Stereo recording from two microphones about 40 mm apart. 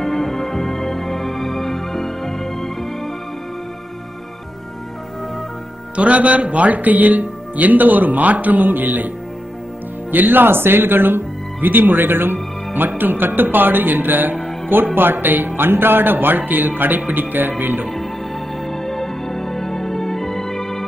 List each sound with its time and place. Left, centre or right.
0.0 s music: centre
5.9 s speech: right
10.1 s speech: right
18.7 s music: centre